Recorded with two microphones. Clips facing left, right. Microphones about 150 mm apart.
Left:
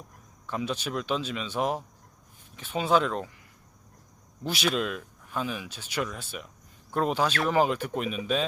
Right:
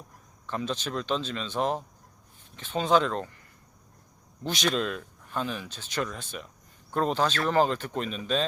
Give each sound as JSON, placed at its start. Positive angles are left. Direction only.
{"t": 0.4, "sound": "speech", "side_deg": 10}
{"t": 4.4, "sound": "speech", "side_deg": 10}